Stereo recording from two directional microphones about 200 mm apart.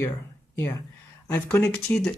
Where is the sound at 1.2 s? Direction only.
10° left (ahead or behind).